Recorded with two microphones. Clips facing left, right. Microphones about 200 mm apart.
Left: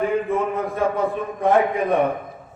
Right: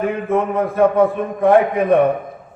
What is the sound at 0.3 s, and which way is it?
A man's voice, 60° right (ahead or behind).